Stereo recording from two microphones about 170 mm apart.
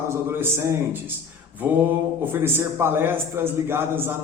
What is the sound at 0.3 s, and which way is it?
Speech, 15° right (ahead or behind).